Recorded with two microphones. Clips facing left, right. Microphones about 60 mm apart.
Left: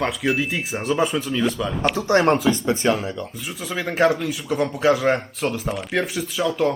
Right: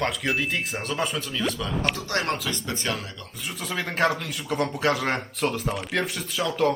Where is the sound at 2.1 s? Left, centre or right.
Centre.